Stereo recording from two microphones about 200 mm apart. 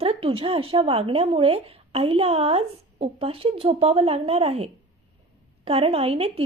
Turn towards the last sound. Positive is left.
turn(degrees=-30)  # may be behind; listen again after turning